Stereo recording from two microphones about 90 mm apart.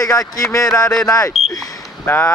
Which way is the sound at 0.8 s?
10° left (ahead or behind).